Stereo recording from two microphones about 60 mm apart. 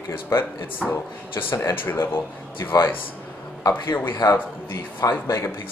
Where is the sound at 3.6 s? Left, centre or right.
Left.